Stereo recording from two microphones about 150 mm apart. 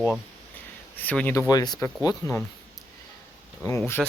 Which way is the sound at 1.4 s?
25° left (ahead or behind).